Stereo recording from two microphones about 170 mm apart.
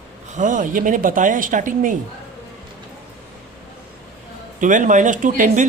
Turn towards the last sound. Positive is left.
turn(degrees=-50)  # may be behind; listen again after turning